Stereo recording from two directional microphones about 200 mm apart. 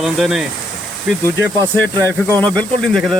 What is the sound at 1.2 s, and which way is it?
Speech, 10° left (ahead or behind).